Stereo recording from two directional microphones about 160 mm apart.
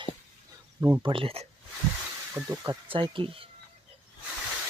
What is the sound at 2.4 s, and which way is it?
Speech, 15° right (ahead or behind).